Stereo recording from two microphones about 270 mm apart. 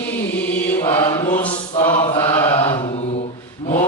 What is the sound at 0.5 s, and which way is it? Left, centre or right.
Mantra, centre.